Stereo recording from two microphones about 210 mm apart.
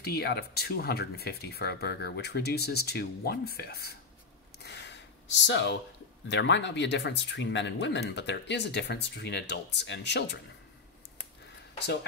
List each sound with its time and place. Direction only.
0.0 s speech: 50° left (ahead or behind)
4.6 s gasp: 55° left (ahead or behind)
6.2 s speech: 60° left (ahead or behind)